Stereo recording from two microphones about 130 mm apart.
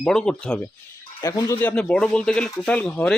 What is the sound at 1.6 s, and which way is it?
Speech, 10° left (ahead or behind).